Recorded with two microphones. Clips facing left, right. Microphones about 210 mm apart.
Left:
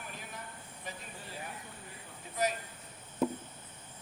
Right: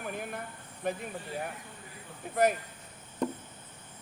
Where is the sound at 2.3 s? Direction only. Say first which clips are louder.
Right 7 dB; 55° right (ahead or behind).